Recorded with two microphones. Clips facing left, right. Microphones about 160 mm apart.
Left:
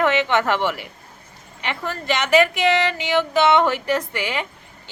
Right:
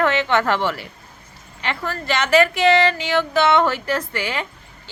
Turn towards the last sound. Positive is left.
turn(degrees=15)  # may be behind; listen again after turning